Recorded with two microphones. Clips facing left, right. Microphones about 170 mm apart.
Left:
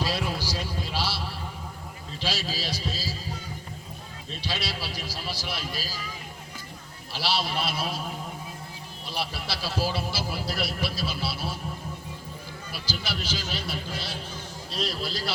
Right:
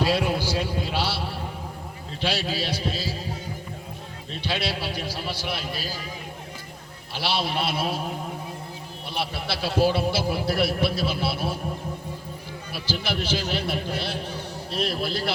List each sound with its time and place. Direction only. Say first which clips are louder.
0.0 s a sound: right 6 dB; 55° right (ahead or behind)
2.2 s a man's voice: right 5 dB; 60° right (ahead or behind)
4.4 s a man's voice: right 5 dB; 55° right (ahead or behind)
7.2 s a man's voice: right 2 dB; 60° right (ahead or behind)
9.0 s a man's voice: right 3 dB; 60° right (ahead or behind)
12.8 s a man's voice: right 6 dB; 60° right (ahead or behind)